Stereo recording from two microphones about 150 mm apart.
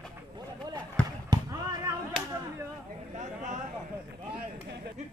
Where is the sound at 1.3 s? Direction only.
25° right (ahead or behind).